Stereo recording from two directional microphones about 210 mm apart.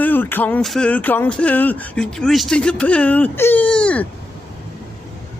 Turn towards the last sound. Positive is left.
turn(degrees=5)  # may be behind; listen again after turning